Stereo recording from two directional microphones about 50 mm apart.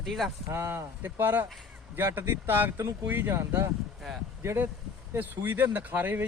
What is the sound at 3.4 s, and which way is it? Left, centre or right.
Speech, right.